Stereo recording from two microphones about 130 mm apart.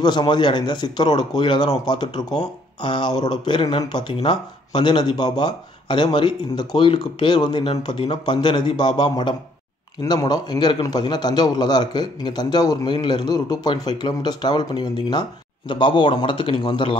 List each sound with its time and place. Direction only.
0.0 s speech: 35° left (ahead or behind)